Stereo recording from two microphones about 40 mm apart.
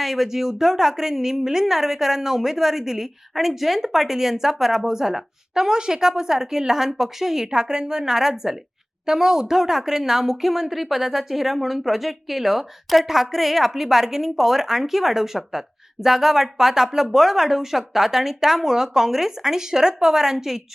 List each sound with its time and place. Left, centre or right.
0.0 s a woman's voice: centre